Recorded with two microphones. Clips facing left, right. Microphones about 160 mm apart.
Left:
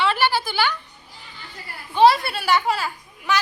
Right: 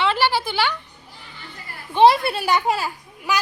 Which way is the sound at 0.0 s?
25° right (ahead or behind).